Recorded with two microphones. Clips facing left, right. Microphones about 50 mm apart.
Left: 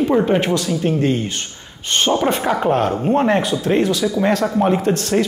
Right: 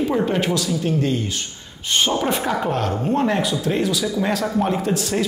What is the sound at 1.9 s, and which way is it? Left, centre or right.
A man's voice, centre.